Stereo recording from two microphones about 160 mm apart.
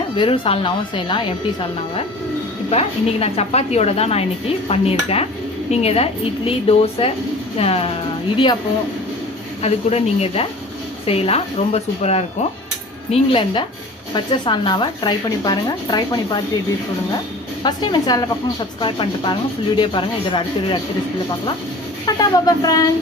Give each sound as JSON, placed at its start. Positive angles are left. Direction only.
{"t": 0.2, "sound": "a woman's voice", "side_deg": 35}
{"t": 2.6, "sound": "a woman's voice", "side_deg": 40}
{"t": 9.6, "sound": "a woman's voice", "side_deg": 40}
{"t": 17.6, "sound": "speech", "side_deg": 25}
{"t": 22.0, "sound": "speech", "side_deg": 25}